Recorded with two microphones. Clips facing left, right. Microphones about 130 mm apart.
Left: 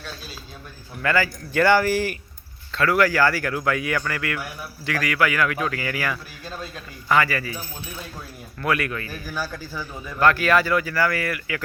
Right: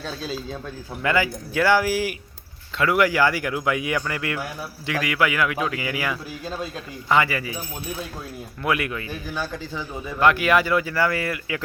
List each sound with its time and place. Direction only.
1.0 s speech: 20° right (ahead or behind)
1.5 s a man's voice: 5° right (ahead or behind)
8.6 s speech: 20° right (ahead or behind)